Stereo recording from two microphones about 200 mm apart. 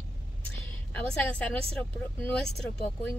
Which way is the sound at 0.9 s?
5° left (ahead or behind).